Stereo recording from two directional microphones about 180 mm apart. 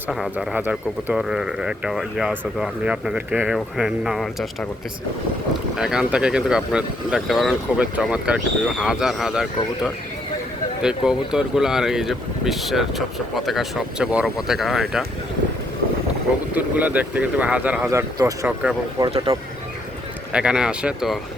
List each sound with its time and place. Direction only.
0.1 s speech: 5° right (ahead or behind)
5.7 s speech: 5° right (ahead or behind)
16.6 s speech: 10° right (ahead or behind)
18.4 s speech: 5° right (ahead or behind)
18.9 s speech: 25° right (ahead or behind)
20.3 s speech: 5° right (ahead or behind)